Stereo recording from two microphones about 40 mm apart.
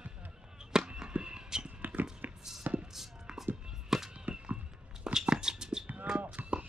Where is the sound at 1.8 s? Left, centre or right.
Right.